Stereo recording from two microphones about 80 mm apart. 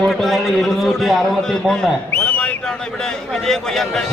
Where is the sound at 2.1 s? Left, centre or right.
Centre.